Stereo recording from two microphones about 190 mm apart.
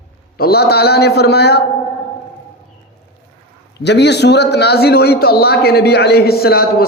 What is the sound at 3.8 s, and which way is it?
A man's voice, 65° left (ahead or behind).